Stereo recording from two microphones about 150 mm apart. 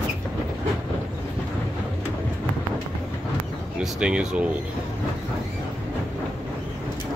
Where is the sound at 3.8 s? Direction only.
5° right (ahead or behind).